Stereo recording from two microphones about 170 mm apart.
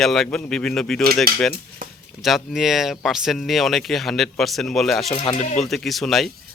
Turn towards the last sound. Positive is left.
turn(degrees=0)  # may be behind; listen again after turning